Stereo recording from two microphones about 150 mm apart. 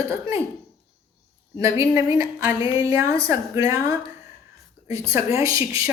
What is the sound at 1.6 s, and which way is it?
A woman's voice, 20° right (ahead or behind).